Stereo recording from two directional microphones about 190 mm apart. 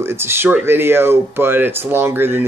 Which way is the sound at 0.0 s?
10° right (ahead or behind).